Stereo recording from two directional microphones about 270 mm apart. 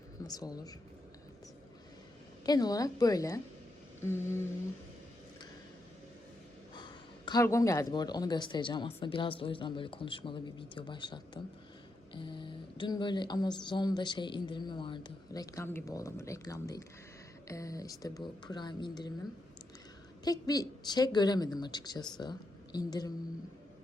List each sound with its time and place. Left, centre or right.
0.3 s speech: centre
2.5 s speech: centre
6.7 s a woman's voice: centre
20.2 s speech: centre